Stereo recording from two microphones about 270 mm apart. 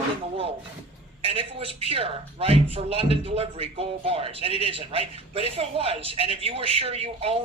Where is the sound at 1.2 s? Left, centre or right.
Right.